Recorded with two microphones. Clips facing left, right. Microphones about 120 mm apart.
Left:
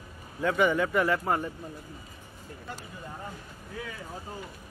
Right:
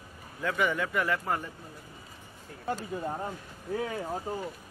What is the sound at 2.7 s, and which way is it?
Speech, 45° right (ahead or behind).